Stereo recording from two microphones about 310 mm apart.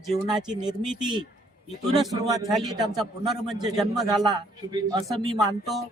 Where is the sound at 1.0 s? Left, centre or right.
Centre.